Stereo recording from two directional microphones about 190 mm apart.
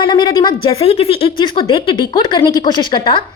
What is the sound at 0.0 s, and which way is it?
A woman's voice, 25° left (ahead or behind).